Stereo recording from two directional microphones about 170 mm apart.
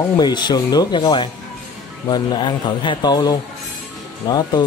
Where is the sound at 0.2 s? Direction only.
25° left (ahead or behind).